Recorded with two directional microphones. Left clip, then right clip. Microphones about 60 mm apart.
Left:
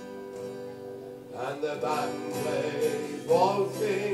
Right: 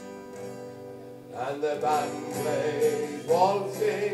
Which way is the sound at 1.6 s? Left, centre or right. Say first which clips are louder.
Right 4 dB; right.